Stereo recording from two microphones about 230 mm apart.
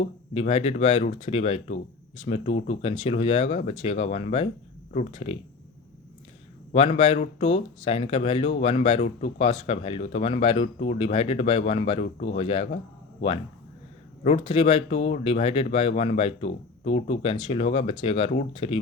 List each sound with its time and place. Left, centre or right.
0.0 s speech: left
6.7 s speech: left
14.3 s speech: left